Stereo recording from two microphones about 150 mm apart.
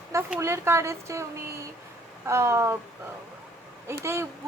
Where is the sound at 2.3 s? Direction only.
15° right (ahead or behind).